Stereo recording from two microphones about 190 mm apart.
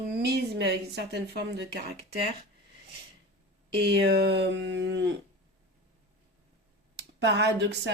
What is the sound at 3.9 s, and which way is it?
Speech, 60° right (ahead or behind).